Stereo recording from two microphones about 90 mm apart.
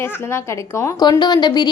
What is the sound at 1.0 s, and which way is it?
Speech, 55° left (ahead or behind).